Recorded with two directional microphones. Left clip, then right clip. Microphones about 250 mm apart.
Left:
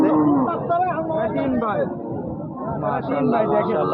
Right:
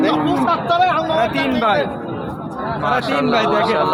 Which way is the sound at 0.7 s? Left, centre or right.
Right.